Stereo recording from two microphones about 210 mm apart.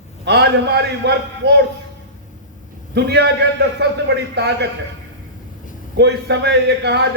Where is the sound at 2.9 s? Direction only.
55° right (ahead or behind).